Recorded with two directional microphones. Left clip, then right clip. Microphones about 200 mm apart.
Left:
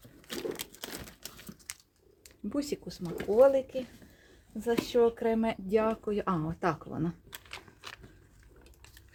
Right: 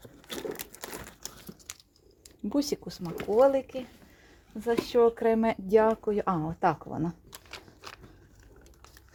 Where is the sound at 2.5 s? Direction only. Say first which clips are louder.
Right 5 dB; 25° right (ahead or behind).